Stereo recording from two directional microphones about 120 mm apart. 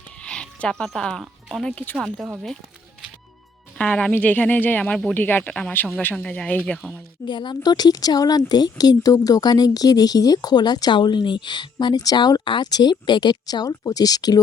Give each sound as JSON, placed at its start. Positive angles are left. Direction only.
{"t": 0.2, "sound": "speech", "side_deg": 10}
{"t": 1.7, "sound": "speech", "side_deg": 10}
{"t": 3.8, "sound": "speech", "side_deg": 10}
{"t": 7.3, "sound": "speech", "side_deg": 40}